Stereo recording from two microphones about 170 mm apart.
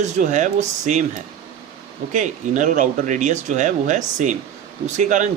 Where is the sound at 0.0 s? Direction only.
45° right (ahead or behind).